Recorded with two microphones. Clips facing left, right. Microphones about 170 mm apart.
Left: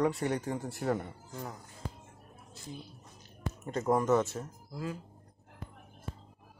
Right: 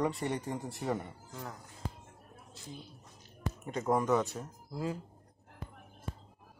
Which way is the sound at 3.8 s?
Centre (ahead or behind).